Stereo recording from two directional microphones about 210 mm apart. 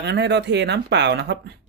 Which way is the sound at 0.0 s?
55° right (ahead or behind).